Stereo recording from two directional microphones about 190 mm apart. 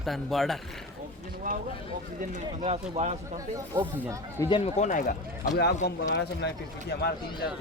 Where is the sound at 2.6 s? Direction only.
35° right (ahead or behind).